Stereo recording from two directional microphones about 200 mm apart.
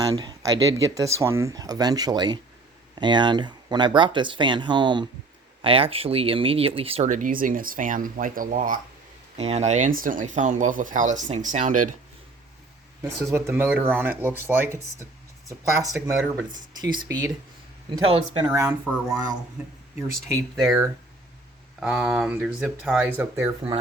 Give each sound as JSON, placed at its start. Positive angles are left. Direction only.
{"t": 0.0, "sound": "speech", "side_deg": -20}
{"t": 13.0, "sound": "speech", "side_deg": -10}
{"t": 21.8, "sound": "speech", "side_deg": -5}